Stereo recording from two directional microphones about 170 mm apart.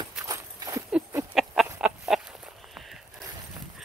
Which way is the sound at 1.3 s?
Centre (ahead or behind).